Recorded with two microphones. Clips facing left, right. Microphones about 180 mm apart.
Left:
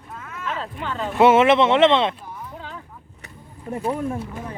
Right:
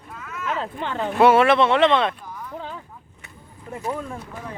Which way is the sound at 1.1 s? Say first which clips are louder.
Left 1 dB; 20° left (ahead or behind).